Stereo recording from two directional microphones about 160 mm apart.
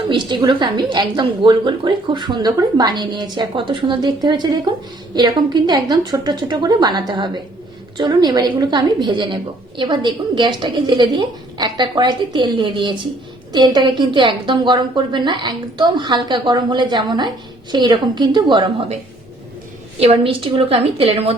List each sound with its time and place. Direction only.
0.1 s a woman's voice: 30° right (ahead or behind)
20.0 s a woman's voice: 35° right (ahead or behind)